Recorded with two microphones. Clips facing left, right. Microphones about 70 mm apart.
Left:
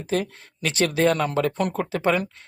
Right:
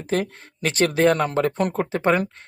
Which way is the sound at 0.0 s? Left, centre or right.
Right.